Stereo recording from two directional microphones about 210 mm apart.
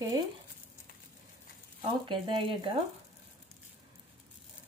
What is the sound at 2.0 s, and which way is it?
Speech, 25° right (ahead or behind).